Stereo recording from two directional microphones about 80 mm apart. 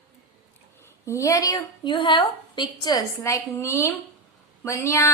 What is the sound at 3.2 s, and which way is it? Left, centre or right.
A woman's voice, left.